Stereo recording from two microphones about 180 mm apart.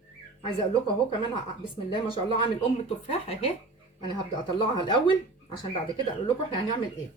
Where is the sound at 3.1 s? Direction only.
35° left (ahead or behind).